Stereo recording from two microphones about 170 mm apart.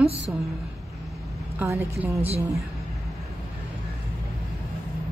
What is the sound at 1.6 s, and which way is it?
Speech, 15° right (ahead or behind).